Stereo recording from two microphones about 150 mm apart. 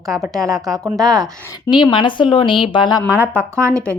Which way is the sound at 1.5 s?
30° left (ahead or behind).